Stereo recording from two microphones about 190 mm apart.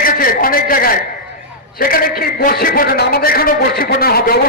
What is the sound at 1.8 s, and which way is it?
A man's voice, 50° left (ahead or behind).